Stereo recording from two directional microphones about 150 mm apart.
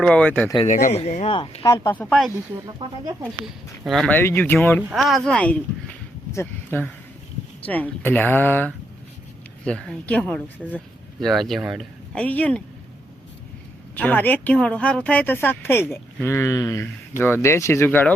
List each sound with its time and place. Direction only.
0.0 s speech: 5° left (ahead or behind)
0.7 s speech: 60° left (ahead or behind); by 2.3 s 5° left (ahead or behind)
3.4 s speech: centre (ahead or behind)
4.1 s speech: 15° left (ahead or behind)
4.9 s speech: centre (ahead or behind)
12.1 s speech: 10° left (ahead or behind)
13.9 s speech: 10° left (ahead or behind)